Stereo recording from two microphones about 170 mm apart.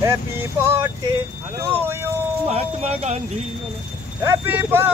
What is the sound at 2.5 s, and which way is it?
Speech, 40° right (ahead or behind).